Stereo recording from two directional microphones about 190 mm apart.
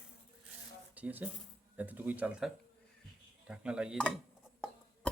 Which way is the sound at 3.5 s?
5° right (ahead or behind).